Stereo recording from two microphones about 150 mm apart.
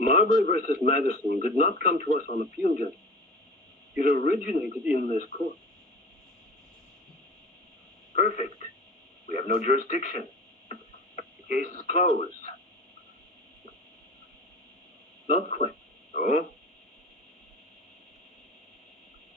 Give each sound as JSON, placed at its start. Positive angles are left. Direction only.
{"t": 0.0, "sound": "a man's voice", "side_deg": 55}
{"t": 3.9, "sound": "a man's voice", "side_deg": 55}
{"t": 8.1, "sound": "a man's voice", "side_deg": 55}
{"t": 10.7, "sound": "radio", "side_deg": 50}
{"t": 15.3, "sound": "speech", "side_deg": 50}